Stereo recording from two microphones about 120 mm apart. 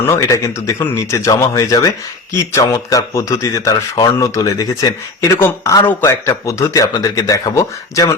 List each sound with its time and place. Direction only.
0.1 s speech: 25° left (ahead or behind)